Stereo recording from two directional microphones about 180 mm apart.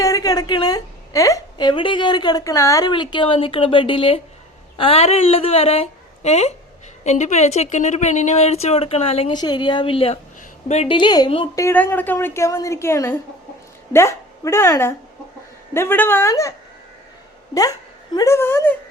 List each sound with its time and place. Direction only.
0.0 s a woman's voice: 20° left (ahead or behind); by 10.9 s 40° left (ahead or behind)
10.9 s a woman's voice: 25° left (ahead or behind)
11.6 s a woman's voice: 10° left (ahead or behind)